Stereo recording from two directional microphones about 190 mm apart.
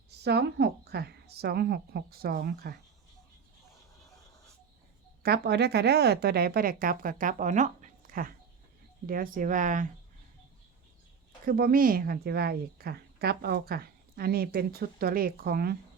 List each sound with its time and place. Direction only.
0.3 s a woman's voice: 60° right (ahead or behind)
5.2 s a woman's voice: 60° right (ahead or behind); by 9.9 s 40° right (ahead or behind)
11.4 s a woman's voice: 50° right (ahead or behind)